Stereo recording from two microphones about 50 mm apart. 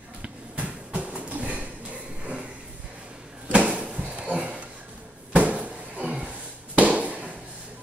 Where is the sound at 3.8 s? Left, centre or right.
Right.